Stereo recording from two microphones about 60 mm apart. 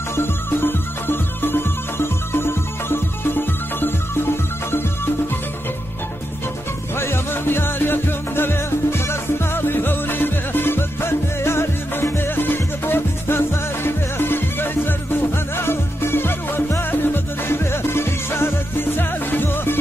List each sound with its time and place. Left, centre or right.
0.1 s music: left
7.0 s music: left